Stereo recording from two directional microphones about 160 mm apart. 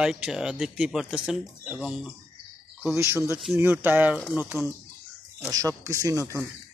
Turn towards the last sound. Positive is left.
turn(degrees=-20)  # may be behind; listen again after turning